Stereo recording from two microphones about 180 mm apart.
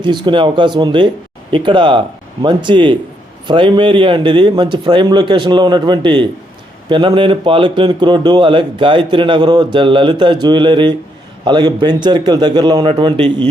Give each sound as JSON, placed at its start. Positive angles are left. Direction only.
{"t": 0.0, "sound": "speech", "side_deg": -25}